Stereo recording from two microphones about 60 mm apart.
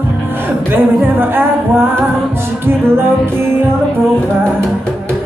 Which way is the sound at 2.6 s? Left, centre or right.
Right.